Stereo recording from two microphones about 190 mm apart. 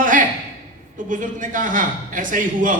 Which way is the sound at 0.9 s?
45° right (ahead or behind).